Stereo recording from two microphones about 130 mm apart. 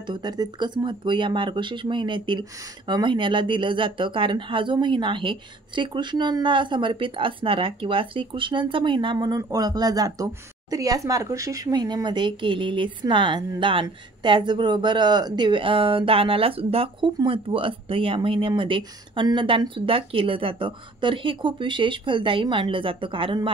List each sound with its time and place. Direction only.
0.0 s speech: 35° right (ahead or behind)